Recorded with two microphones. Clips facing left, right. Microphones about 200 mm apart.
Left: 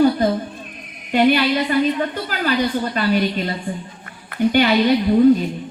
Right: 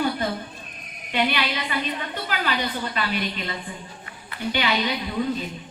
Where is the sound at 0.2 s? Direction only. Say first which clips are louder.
Left 9 dB; 40° left (ahead or behind).